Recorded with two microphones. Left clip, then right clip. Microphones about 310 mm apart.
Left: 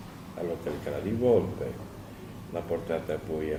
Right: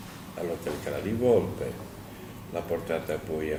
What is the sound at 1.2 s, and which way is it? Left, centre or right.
Speech, left.